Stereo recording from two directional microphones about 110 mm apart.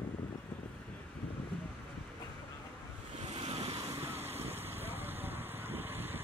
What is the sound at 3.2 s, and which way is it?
Waves, 70° right (ahead or behind).